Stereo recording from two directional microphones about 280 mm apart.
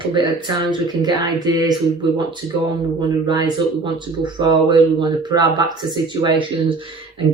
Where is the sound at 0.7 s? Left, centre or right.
Centre.